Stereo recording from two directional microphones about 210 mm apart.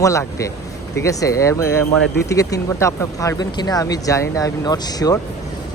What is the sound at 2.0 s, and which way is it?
Speech, 50° left (ahead or behind).